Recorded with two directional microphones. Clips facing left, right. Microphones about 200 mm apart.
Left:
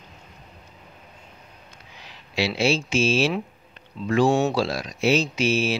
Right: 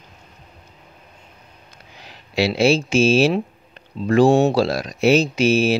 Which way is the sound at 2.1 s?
40° right (ahead or behind).